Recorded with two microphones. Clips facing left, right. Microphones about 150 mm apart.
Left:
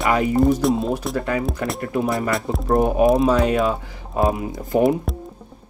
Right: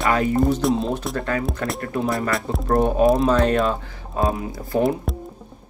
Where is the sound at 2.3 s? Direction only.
Centre (ahead or behind).